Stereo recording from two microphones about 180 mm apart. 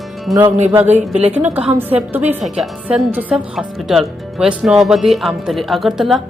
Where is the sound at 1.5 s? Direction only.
10° right (ahead or behind).